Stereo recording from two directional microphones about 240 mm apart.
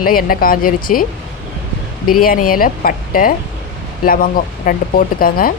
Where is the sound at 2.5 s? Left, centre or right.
Left.